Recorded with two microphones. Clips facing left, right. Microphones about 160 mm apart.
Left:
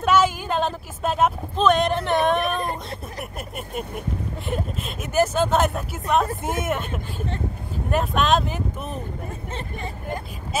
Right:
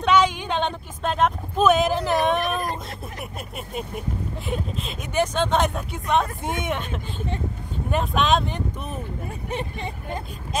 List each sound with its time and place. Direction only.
0.0 s a sound: 5° left (ahead or behind)
1.6 s speech: 5° right (ahead or behind)
9.5 s speech: 20° right (ahead or behind)
10.5 s speech: 5° left (ahead or behind)